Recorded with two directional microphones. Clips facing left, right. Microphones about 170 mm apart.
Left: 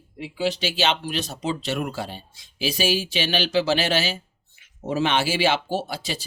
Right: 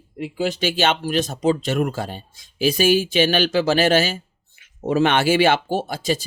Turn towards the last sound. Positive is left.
turn(degrees=-45)  # may be behind; listen again after turning